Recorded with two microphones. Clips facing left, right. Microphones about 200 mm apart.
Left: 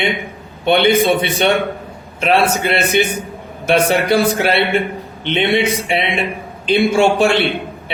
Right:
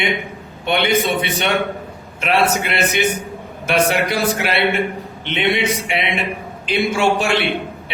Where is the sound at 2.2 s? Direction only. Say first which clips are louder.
Left 3 dB; 30° left (ahead or behind).